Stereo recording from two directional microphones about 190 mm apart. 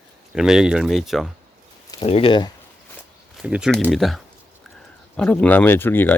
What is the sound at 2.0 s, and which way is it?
Speech, 30° left (ahead or behind).